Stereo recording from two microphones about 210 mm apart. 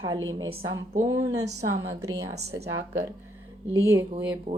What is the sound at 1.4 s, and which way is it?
Speech, 90° right.